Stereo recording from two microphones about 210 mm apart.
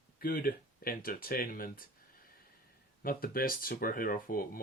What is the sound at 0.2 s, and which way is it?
Speech, 45° left (ahead or behind).